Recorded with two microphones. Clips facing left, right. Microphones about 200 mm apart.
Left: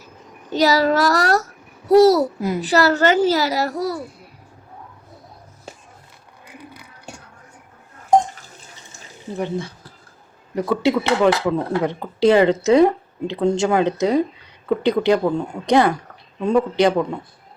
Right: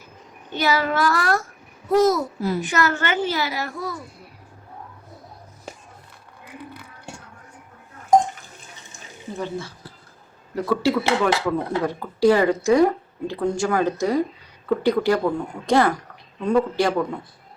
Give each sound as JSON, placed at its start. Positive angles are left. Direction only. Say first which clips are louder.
{"t": 0.5, "sound": "a child's voice", "louder": "left 6 dB", "side_deg": 40}
{"t": 9.4, "sound": "speech", "louder": "left 5 dB", "side_deg": 20}